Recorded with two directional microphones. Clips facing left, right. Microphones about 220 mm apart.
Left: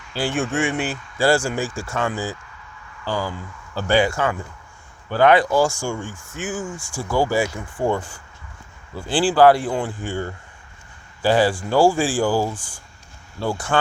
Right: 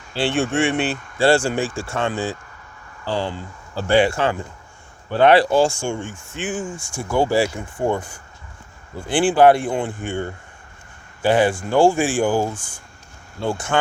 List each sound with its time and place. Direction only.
0.2 s speech: 30° right (ahead or behind)